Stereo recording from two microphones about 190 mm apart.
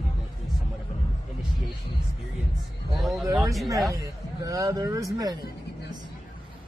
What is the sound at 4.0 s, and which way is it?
Speech, 15° right (ahead or behind).